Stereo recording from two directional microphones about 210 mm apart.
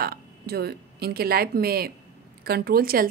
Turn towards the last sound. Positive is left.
turn(degrees=-45)  # may be behind; listen again after turning